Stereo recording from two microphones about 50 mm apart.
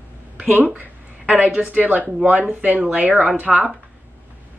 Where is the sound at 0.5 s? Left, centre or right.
Right.